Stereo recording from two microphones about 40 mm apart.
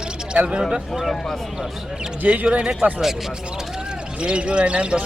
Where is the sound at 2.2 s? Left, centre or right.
Right.